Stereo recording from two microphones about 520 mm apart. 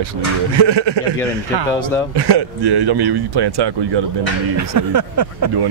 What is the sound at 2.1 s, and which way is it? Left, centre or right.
Speech, right.